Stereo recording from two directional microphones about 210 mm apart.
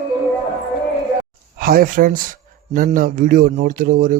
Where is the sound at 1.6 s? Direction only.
45° right (ahead or behind).